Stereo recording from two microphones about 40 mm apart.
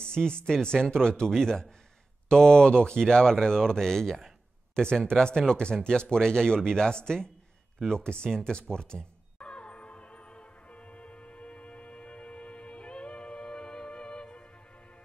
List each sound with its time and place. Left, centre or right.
0.0 s speech: centre
8.5 s music: left